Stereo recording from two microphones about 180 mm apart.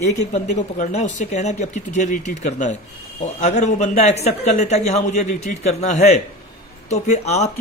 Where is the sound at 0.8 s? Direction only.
40° left (ahead or behind).